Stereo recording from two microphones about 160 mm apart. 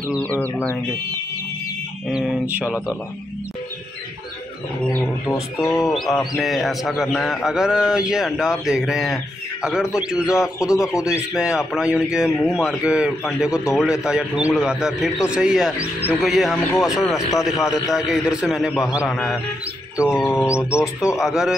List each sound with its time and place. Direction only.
0.0 s speech: 10° left (ahead or behind)
2.0 s a man's voice: 5° right (ahead or behind)
5.7 s a man's voice: centre (ahead or behind)
10.8 s speech: 20° left (ahead or behind)
11.1 s a man's voice: 5° right (ahead or behind)
15.8 s speech: 15° left (ahead or behind)
16.2 s a man's voice: centre (ahead or behind)
20.2 s speech: 15° left (ahead or behind)
21.2 s a man's voice: centre (ahead or behind)